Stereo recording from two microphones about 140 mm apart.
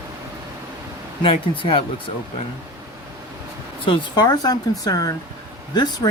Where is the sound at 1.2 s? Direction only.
40° left (ahead or behind).